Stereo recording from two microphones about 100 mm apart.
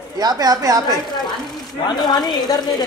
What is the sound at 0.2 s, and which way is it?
Speech, 40° right (ahead or behind).